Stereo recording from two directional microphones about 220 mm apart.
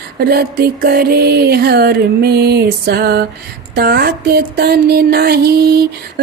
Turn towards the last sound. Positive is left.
turn(degrees=-45)  # may be behind; listen again after turning